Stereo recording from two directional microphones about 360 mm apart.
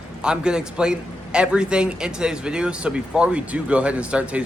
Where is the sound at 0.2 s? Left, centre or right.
Centre.